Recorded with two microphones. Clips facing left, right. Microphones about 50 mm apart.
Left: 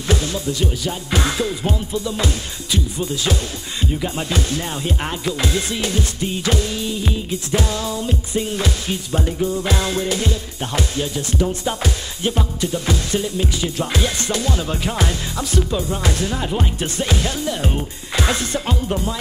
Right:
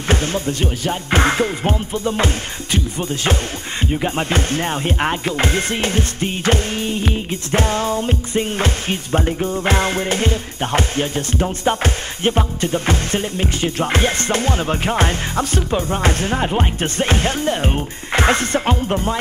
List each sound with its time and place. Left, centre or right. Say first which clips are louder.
0.1 s music: right 2 dB; right